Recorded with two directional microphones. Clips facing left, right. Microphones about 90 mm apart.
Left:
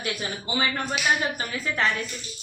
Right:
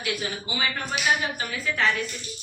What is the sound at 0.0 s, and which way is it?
Speech, 40° left (ahead or behind).